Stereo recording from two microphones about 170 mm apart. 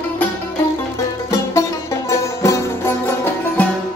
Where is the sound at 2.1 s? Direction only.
15° left (ahead or behind).